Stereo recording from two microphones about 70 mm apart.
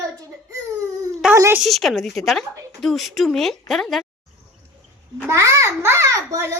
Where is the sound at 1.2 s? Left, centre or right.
Centre.